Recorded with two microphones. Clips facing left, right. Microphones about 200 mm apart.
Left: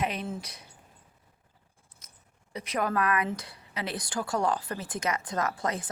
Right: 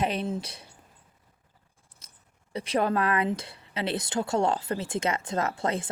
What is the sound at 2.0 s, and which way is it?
Scissors, 30° right (ahead or behind).